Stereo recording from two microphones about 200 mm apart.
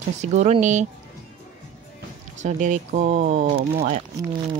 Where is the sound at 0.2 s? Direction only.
35° right (ahead or behind).